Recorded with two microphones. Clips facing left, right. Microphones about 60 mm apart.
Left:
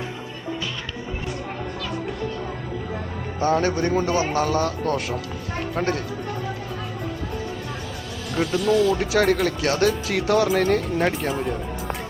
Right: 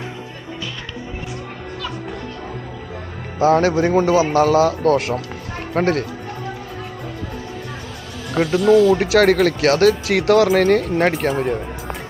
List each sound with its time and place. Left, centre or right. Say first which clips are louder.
3.4 s speech: right 6 dB; right
3.8 s a man's voice: right 6 dB; centre
4.4 s speech: right 7 dB; right
5.7 s speech: right 7 dB; right
8.5 s speech: right 7 dB; right
9.1 s speech: right 6 dB; right